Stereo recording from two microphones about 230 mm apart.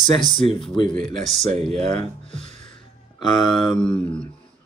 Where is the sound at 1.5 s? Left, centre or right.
Right.